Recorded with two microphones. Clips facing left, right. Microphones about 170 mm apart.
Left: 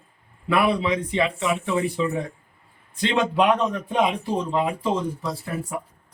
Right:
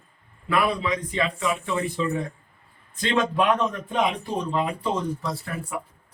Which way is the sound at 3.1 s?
20° left (ahead or behind).